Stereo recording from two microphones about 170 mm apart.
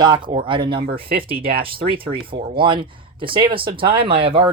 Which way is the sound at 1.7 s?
30° right (ahead or behind).